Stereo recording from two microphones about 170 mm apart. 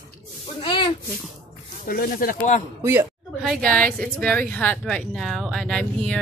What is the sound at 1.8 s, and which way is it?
Speech, 60° left (ahead or behind).